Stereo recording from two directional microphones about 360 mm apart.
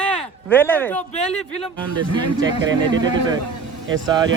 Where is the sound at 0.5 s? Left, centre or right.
Centre.